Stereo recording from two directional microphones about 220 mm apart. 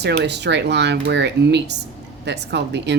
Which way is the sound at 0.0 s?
50° right (ahead or behind).